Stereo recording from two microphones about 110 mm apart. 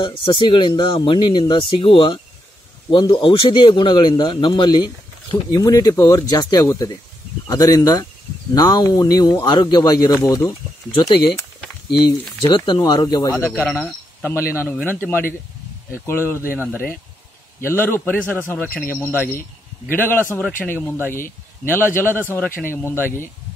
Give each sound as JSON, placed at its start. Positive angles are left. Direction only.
{"t": 0.0, "sound": "speech", "side_deg": 50}
{"t": 5.5, "sound": "a man's voice", "side_deg": 35}
{"t": 12.1, "sound": "a man's voice", "side_deg": 40}
{"t": 14.2, "sound": "a man's voice", "side_deg": 25}